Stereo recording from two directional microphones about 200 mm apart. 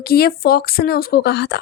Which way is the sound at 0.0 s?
50° left (ahead or behind).